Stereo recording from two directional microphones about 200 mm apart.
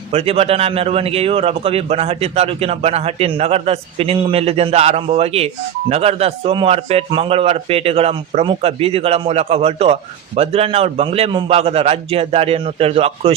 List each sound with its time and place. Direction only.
0.1 s a man's voice: 30° right (ahead or behind)